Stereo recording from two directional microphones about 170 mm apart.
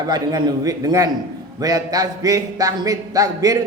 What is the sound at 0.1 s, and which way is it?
A man's voice, 25° right (ahead or behind).